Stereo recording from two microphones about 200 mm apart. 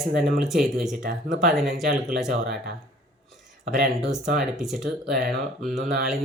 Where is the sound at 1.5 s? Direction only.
Centre (ahead or behind).